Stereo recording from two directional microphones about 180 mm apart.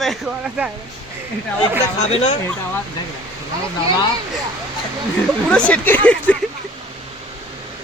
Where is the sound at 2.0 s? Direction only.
40° left (ahead or behind).